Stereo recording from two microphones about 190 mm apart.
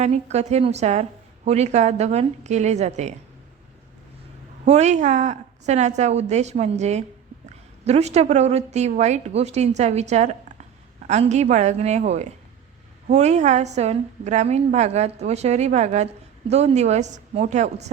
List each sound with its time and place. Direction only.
0.0 s a woman's voice: 35° right (ahead or behind)
4.6 s a woman's voice: 35° right (ahead or behind)